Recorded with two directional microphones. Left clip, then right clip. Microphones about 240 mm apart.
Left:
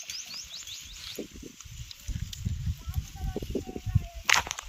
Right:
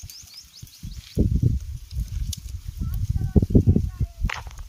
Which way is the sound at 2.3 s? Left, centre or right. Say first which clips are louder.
Right 6 dB; right.